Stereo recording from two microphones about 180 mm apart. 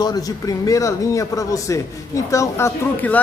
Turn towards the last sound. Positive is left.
turn(degrees=10)  # may be behind; listen again after turning